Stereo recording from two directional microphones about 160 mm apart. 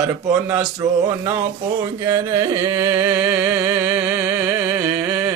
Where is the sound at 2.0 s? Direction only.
20° right (ahead or behind).